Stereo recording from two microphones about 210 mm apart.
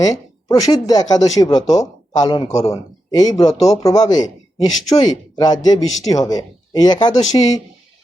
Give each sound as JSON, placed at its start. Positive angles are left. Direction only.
{"t": 0.0, "sound": "speech", "side_deg": 15}